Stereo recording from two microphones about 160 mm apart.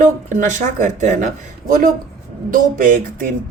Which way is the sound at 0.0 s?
50° right (ahead or behind).